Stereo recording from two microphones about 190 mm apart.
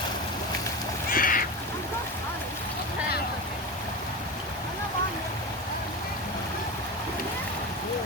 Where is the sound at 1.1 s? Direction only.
50° left (ahead or behind).